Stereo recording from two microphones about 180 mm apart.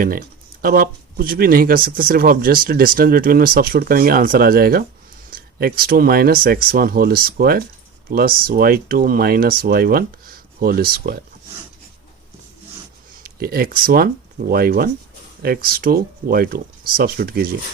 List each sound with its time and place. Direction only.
0.0 s speech: 50° right (ahead or behind)
13.2 s speech: 55° right (ahead or behind)